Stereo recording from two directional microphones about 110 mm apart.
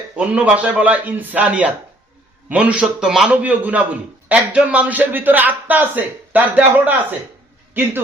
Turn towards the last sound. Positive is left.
turn(degrees=-15)  # may be behind; listen again after turning